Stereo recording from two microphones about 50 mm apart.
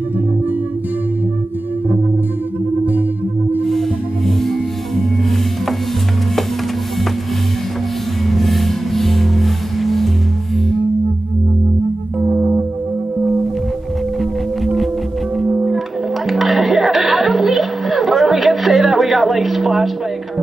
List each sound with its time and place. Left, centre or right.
4.4 s music: centre
8.3 s music: centre
15.4 s music: right
16.3 s music: centre